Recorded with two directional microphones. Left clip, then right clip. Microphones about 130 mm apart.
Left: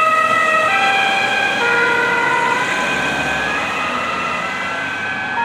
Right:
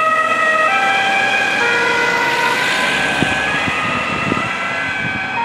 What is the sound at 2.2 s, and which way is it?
Emergency vehicle, 20° right (ahead or behind).